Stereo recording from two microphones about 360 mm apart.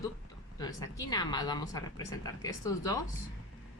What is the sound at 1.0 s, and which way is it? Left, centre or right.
A woman's voice, centre.